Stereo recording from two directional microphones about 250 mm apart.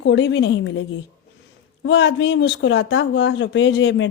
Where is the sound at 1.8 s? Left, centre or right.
Left.